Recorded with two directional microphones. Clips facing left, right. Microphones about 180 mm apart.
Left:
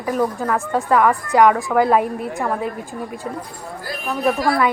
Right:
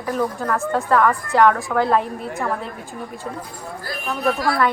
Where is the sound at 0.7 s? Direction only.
15° left (ahead or behind).